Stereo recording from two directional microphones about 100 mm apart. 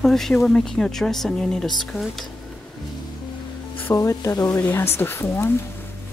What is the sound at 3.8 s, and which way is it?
Speech, 30° left (ahead or behind).